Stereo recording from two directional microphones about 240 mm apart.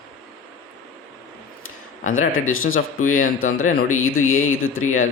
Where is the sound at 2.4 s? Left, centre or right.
Left.